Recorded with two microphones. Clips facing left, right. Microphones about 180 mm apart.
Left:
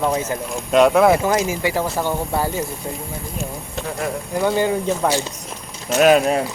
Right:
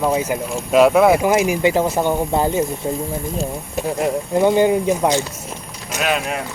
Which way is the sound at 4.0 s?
20° right (ahead or behind).